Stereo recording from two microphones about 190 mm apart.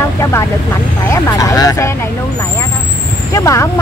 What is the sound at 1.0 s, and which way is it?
Speech, 15° left (ahead or behind).